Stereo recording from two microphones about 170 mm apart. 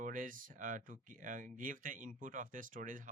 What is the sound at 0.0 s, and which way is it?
Speech, 55° right (ahead or behind).